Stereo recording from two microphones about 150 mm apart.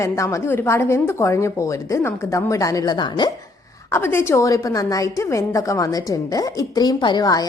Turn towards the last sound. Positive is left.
turn(degrees=25)  # may be behind; listen again after turning